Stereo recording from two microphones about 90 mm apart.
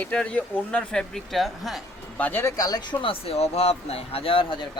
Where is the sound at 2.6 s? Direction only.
45° left (ahead or behind).